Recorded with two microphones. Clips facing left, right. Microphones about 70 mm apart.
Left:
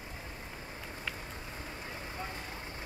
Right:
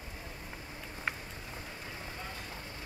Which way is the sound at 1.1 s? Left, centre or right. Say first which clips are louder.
Right 5 dB; right.